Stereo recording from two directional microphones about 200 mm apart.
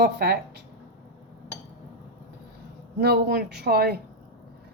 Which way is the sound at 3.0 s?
50° right (ahead or behind).